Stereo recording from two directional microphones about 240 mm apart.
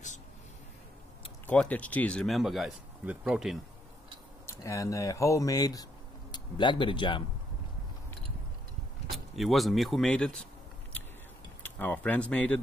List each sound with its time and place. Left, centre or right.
1.5 s speech: centre
4.5 s speech: centre
9.1 s speech: centre
11.6 s speech: centre